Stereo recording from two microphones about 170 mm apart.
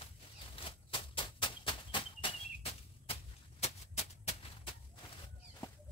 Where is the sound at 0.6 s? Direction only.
30° left (ahead or behind).